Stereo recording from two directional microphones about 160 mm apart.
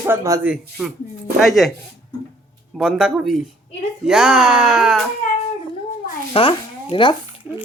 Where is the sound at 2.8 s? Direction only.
5° right (ahead or behind).